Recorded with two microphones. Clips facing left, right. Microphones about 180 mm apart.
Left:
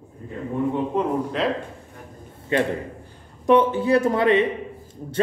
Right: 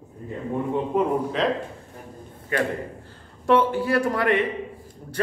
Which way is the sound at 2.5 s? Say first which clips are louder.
Left 3 dB; 25° left (ahead or behind).